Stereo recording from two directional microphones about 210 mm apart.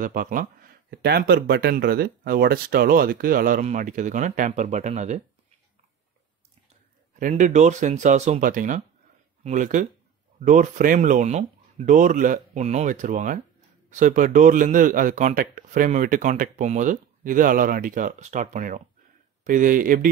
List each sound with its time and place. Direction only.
0.0 s speech: 40° right (ahead or behind)
7.2 s a man's voice: 40° right (ahead or behind)